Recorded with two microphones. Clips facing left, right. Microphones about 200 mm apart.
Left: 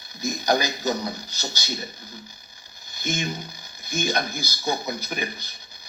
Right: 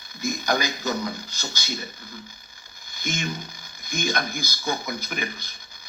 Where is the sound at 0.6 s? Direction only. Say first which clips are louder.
Left 1 dB; 40° left (ahead or behind).